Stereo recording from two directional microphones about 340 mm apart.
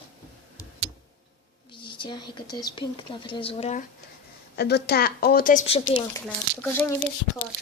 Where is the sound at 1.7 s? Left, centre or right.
Centre.